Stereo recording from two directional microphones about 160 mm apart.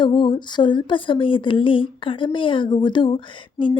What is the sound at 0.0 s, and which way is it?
Speech, 30° left (ahead or behind).